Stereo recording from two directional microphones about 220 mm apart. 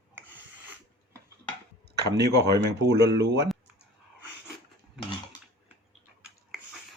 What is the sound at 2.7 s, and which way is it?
Speech, 50° right (ahead or behind).